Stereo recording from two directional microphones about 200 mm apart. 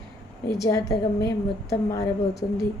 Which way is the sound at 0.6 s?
15° left (ahead or behind).